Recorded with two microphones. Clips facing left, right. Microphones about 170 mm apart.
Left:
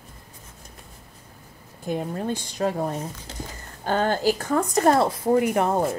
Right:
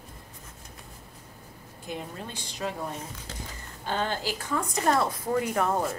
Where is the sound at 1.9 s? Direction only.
45° left (ahead or behind); by 6.0 s 30° left (ahead or behind).